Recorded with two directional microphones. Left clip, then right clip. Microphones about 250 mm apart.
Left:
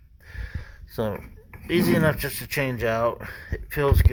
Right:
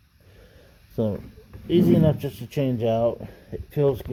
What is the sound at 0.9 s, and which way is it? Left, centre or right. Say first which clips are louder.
Speech: right 1 dB; centre.